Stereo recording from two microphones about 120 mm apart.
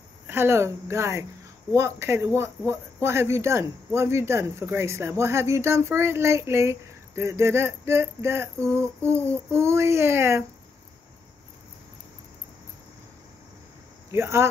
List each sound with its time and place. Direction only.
0.3 s speech: 20° right (ahead or behind)
14.1 s speech: 20° right (ahead or behind)